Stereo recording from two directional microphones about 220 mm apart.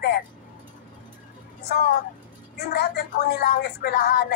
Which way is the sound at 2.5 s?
45° left (ahead or behind).